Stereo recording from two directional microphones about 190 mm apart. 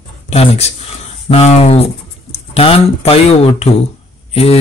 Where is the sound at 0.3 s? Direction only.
30° left (ahead or behind).